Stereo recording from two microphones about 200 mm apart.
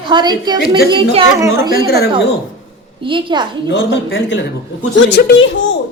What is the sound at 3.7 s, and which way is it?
A woman's voice, 70° left (ahead or behind).